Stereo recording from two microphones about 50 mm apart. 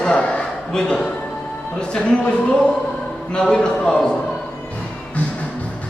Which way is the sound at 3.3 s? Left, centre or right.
Centre.